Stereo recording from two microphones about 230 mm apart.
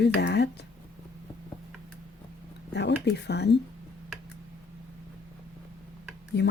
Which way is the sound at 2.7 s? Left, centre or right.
Left.